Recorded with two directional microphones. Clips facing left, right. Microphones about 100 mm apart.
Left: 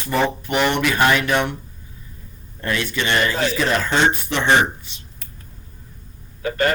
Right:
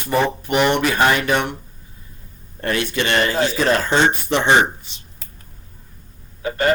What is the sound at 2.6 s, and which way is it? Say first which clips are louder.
Speech: right 2 dB; 50° right (ahead or behind).